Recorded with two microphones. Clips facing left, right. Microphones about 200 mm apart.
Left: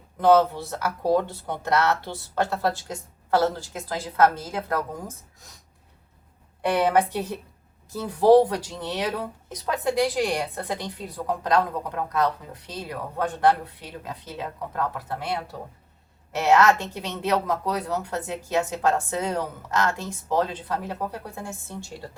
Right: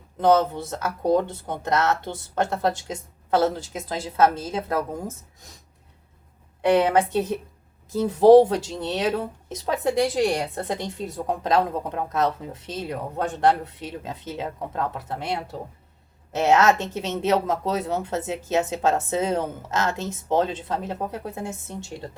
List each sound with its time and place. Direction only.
0.2 s speech: 20° right (ahead or behind)
6.7 s speech: 20° right (ahead or behind)
16.6 s speech: 20° right (ahead or behind)